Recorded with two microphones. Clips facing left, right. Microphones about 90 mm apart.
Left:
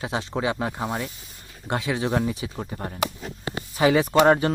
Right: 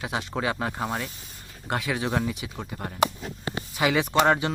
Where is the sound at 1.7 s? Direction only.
25° left (ahead or behind).